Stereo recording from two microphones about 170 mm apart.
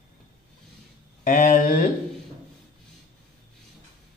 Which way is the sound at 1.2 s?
50° left (ahead or behind).